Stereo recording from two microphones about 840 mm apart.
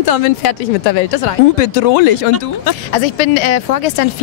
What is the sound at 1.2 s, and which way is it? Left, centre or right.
Speech, left.